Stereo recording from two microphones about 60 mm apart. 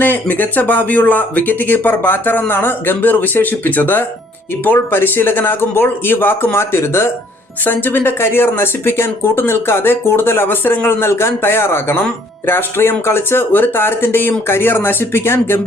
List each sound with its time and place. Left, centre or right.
0.0 s speech: left
7.6 s speech: left